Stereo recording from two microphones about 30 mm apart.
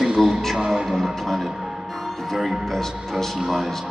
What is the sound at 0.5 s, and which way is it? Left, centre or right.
Speech, right.